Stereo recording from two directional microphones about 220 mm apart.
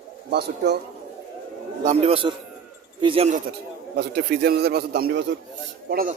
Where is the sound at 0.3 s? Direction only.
50° right (ahead or behind).